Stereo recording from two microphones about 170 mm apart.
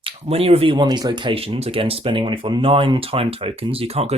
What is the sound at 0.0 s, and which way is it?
Speech, 35° right (ahead or behind).